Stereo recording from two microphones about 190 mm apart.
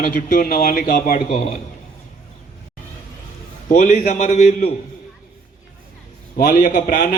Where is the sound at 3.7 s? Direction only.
45° left (ahead or behind).